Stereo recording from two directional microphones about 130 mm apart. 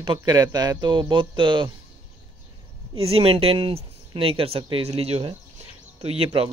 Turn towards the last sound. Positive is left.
turn(degrees=-50)  # may be behind; listen again after turning